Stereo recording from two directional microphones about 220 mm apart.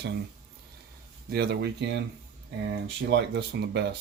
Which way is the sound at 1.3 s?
50° right (ahead or behind).